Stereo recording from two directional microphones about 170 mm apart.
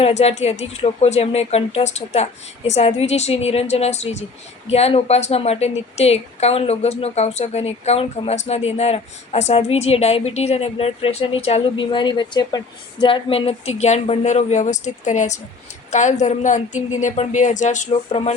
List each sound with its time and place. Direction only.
0.0 s a woman's voice: 40° left (ahead or behind)